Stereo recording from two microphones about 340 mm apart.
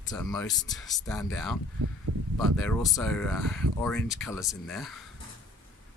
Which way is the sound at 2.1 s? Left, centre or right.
Right.